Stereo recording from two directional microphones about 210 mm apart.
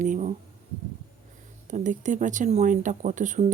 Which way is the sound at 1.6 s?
35° right (ahead or behind).